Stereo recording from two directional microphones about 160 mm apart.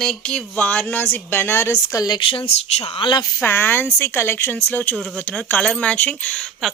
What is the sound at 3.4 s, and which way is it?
A woman's voice, 15° left (ahead or behind).